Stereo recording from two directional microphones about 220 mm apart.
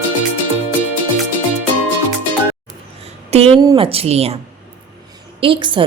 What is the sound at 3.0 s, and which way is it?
Speech, 25° right (ahead or behind).